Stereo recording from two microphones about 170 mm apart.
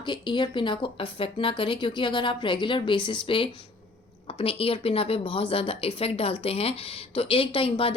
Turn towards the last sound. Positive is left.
turn(degrees=30)  # may be behind; listen again after turning